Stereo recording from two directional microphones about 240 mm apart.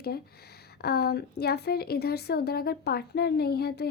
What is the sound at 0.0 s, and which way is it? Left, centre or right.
A woman's voice, left.